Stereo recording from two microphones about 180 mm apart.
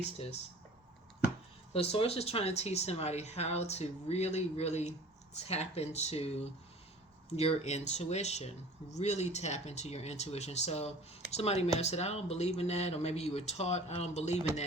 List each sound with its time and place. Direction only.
1.7 s speech: 30° left (ahead or behind)